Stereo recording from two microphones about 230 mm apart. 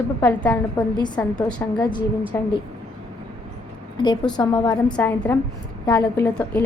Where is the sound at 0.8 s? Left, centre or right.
Centre.